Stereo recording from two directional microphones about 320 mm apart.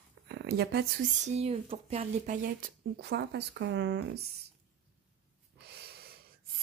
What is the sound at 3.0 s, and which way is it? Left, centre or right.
A woman's voice, right.